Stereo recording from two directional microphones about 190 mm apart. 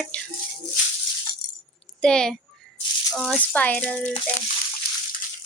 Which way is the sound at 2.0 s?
5° left (ahead or behind).